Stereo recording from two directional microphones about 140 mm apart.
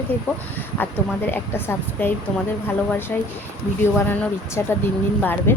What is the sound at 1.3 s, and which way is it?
Speech, 15° left (ahead or behind).